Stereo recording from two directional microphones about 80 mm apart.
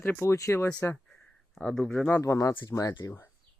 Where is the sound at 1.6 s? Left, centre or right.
Centre.